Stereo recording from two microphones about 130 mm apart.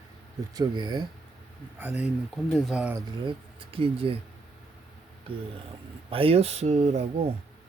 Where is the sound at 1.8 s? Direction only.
10° right (ahead or behind).